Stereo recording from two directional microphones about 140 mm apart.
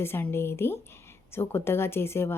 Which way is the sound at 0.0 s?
15° left (ahead or behind).